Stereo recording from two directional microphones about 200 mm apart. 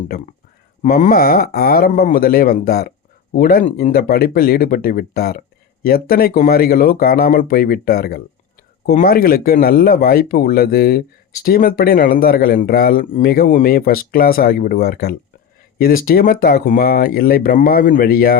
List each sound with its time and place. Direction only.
0.8 s speech: 40° left (ahead or behind)